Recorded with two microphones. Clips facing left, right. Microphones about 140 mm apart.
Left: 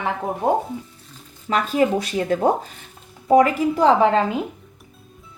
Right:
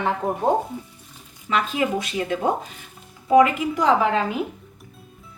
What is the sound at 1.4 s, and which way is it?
Speech, 40° left (ahead or behind).